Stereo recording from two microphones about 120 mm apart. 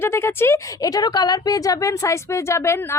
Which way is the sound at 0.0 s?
20° left (ahead or behind).